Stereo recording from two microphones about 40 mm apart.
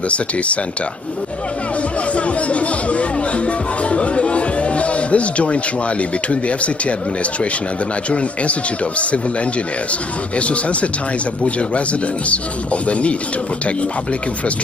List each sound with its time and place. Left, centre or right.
2.1 s speech: left
8.1 s speech: left
10.3 s speech: left
12.8 s speech: left